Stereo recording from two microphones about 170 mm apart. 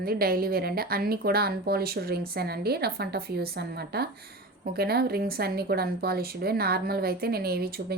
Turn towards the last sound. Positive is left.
turn(degrees=-65)  # may be behind; listen again after turning